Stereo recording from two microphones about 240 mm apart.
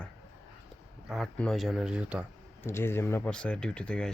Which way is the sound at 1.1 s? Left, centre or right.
Centre.